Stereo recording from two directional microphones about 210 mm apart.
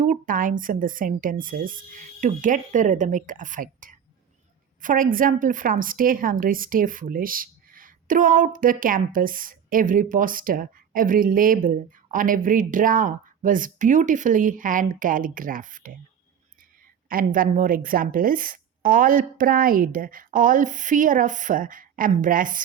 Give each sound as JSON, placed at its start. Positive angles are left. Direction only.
{"t": 0.0, "sound": "a woman's voice", "side_deg": -40}
{"t": 17.1, "sound": "speech", "side_deg": -40}